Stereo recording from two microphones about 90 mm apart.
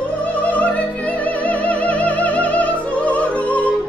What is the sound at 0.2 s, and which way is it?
Music, 15° left (ahead or behind).